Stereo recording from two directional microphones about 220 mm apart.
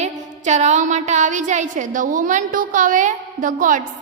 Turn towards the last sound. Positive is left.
turn(degrees=-35)  # may be behind; listen again after turning